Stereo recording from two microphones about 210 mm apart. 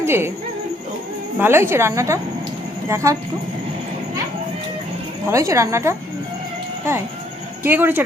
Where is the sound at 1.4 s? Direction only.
10° right (ahead or behind).